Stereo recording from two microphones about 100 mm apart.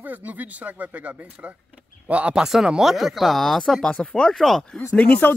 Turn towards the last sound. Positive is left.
turn(degrees=15)  # may be behind; listen again after turning